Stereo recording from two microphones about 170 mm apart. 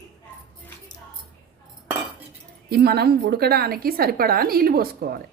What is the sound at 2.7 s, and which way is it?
A woman's voice, 70° right (ahead or behind).